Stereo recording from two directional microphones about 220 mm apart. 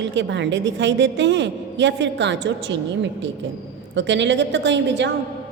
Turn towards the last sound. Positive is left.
turn(degrees=-55)  # may be behind; listen again after turning